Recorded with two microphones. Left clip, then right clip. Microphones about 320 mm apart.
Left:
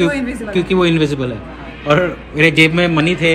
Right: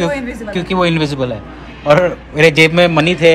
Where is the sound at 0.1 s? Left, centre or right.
Right.